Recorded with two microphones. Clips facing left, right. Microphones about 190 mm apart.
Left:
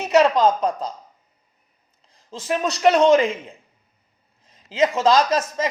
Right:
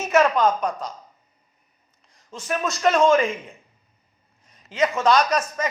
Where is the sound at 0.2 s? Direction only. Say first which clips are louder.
Left 2 dB; 25° left (ahead or behind).